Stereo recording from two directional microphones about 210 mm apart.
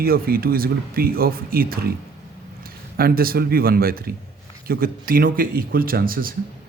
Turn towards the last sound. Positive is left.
turn(degrees=-45)  # may be behind; listen again after turning